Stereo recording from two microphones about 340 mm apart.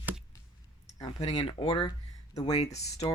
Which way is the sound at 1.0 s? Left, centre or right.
Centre.